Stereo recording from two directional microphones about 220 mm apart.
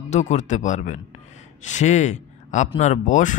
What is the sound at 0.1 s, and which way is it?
Speech, 30° left (ahead or behind).